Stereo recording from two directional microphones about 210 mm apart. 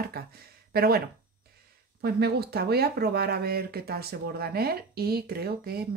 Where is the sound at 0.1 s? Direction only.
45° right (ahead or behind).